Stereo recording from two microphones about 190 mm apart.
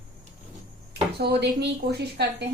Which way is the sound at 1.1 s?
60° right (ahead or behind).